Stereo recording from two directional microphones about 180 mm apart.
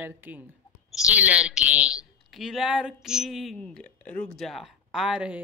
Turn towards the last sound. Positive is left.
turn(degrees=-5)  # may be behind; listen again after turning